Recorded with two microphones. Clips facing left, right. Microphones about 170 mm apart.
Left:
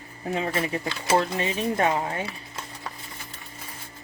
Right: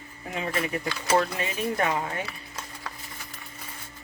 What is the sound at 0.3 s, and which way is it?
Speech, 35° left (ahead or behind).